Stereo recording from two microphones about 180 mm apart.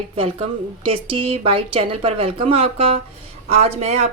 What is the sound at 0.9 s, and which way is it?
A woman's voice, 30° right (ahead or behind).